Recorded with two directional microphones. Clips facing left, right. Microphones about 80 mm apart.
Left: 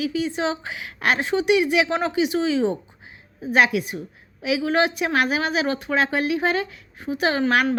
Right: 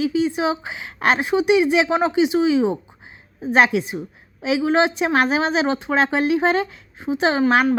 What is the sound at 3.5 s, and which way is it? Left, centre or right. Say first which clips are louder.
A woman's voice: right 2 dB; right.